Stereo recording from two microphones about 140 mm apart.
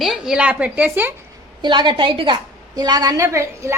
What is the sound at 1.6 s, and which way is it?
A woman's voice, 35° right (ahead or behind).